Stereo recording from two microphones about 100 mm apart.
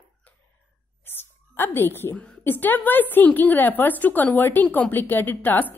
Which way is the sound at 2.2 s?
20° left (ahead or behind).